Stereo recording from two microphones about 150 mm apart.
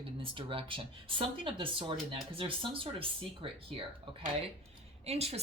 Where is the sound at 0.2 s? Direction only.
35° right (ahead or behind).